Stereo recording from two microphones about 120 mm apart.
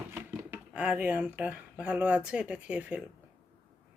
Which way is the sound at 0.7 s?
10° right (ahead or behind).